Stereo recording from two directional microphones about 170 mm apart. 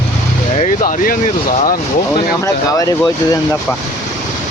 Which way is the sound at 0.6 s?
50° left (ahead or behind).